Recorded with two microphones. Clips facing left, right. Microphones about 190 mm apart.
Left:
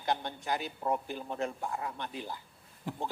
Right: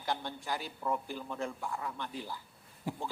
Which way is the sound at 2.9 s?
10° right (ahead or behind).